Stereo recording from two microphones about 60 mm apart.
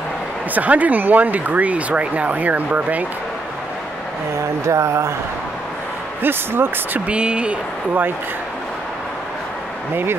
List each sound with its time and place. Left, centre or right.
0.6 s speech: right
4.4 s a sound: right
6.2 s speech: right
7.1 s speech: centre